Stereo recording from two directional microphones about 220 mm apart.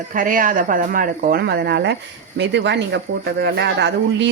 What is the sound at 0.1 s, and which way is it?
Speech, 40° right (ahead or behind).